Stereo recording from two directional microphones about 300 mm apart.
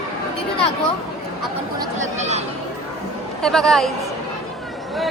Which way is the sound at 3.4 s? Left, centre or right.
Centre.